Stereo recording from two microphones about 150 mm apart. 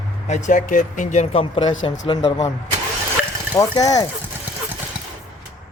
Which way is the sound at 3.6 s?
25° left (ahead or behind).